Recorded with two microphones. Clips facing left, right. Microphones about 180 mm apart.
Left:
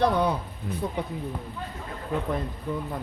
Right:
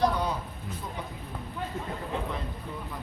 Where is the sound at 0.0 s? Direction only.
60° left (ahead or behind).